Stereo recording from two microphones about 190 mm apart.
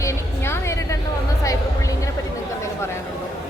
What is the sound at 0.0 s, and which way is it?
Music, 15° left (ahead or behind).